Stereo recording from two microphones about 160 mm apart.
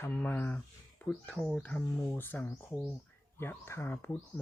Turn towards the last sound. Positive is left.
turn(degrees=10)  # may be behind; listen again after turning